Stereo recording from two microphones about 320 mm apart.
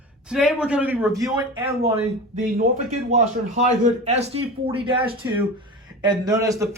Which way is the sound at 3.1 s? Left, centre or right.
Right.